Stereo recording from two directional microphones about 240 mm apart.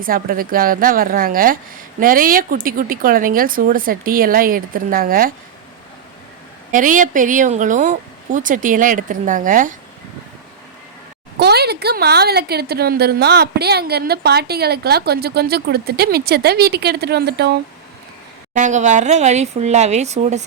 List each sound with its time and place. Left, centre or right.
0.0 s a woman's voice: right
6.7 s a woman's voice: right
11.3 s a woman's voice: right
18.5 s speech: right